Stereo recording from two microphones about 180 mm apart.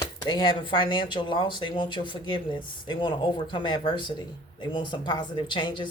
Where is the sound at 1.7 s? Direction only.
25° left (ahead or behind).